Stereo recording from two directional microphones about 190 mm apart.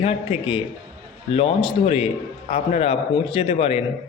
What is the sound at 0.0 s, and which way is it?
A man's voice, 30° left (ahead or behind).